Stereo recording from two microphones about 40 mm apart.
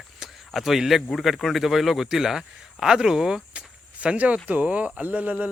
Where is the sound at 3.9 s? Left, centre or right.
Right.